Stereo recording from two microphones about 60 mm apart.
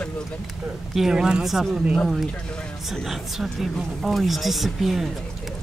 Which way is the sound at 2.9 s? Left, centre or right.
Centre.